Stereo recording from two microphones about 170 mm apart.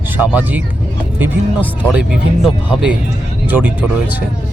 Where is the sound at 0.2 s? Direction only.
10° right (ahead or behind).